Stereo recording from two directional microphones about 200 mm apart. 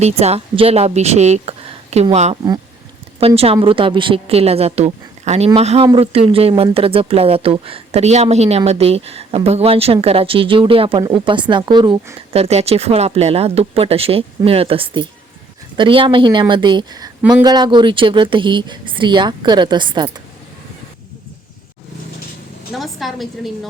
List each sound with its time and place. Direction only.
0.0 s a woman's voice: 30° right (ahead or behind)
22.8 s a woman's voice: centre (ahead or behind)